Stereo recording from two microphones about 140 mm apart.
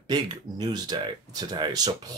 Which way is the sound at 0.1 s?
30° right (ahead or behind).